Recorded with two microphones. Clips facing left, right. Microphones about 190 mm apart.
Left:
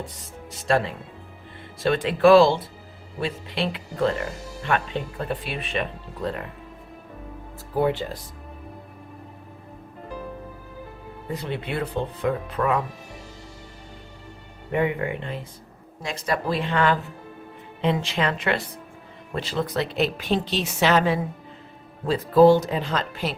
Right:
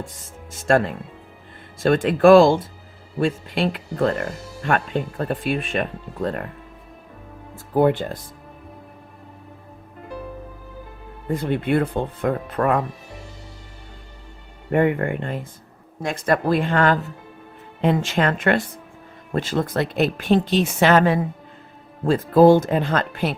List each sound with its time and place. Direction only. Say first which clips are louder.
0.0 s speech: right 1 dB; 50° right (ahead or behind)
7.8 s speech: right 5 dB; 50° right (ahead or behind)
11.3 s speech: right 8 dB; 50° right (ahead or behind)
14.7 s speech: right 5 dB; 55° right (ahead or behind)